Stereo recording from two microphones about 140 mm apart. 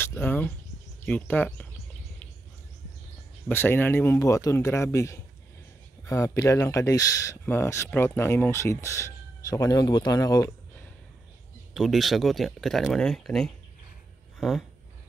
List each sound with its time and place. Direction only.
0.0 s cricket: 15° left (ahead or behind)
1.0 s speech: 10° left (ahead or behind)
3.4 s speech: 15° left (ahead or behind)
11.7 s speech: centre (ahead or behind)